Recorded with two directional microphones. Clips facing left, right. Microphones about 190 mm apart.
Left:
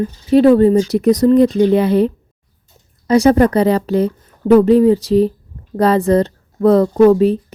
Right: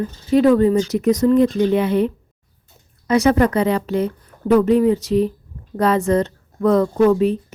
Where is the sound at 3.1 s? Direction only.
35° left (ahead or behind).